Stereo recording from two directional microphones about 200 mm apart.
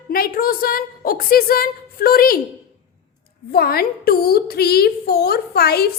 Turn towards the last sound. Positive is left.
turn(degrees=50)  # may be behind; listen again after turning